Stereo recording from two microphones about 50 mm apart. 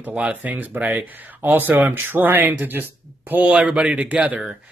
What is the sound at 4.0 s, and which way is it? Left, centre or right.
Speech, right.